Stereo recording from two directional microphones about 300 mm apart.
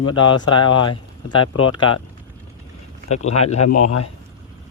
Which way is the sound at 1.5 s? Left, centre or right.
Left.